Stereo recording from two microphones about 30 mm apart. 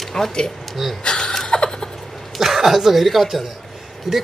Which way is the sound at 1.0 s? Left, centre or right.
Centre.